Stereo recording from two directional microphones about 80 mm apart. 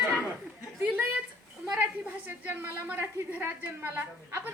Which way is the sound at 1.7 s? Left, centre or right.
Centre.